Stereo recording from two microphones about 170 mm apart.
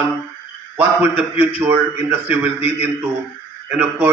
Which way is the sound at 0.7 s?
10° right (ahead or behind).